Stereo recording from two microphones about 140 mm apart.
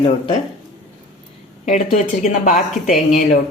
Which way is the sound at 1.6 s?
55° left (ahead or behind).